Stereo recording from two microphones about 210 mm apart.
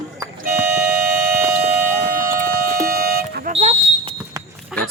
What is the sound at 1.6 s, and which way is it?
Music, 45° right (ahead or behind).